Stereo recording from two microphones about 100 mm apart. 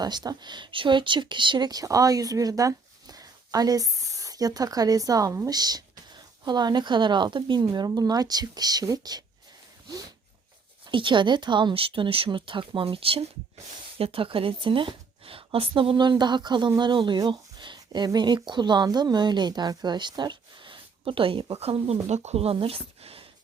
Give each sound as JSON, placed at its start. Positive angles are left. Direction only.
{"t": 0.0, "sound": "speech", "side_deg": -45}
{"t": 10.8, "sound": "a woman's voice", "side_deg": -55}